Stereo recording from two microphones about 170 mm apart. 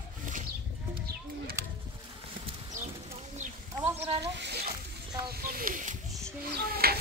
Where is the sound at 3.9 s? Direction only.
35° right (ahead or behind).